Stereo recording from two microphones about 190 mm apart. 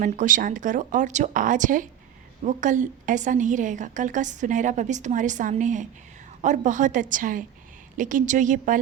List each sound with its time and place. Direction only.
0.0 s a woman's voice: 40° right (ahead or behind)